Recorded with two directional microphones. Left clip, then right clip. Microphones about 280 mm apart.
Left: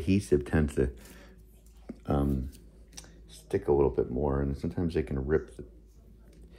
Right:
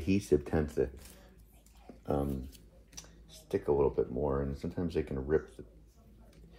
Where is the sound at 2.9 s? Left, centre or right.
Left.